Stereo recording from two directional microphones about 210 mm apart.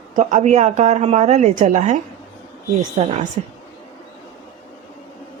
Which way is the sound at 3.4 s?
30° right (ahead or behind).